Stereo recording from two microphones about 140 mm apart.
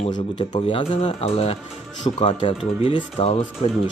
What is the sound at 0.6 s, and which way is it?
Speech, 45° left (ahead or behind).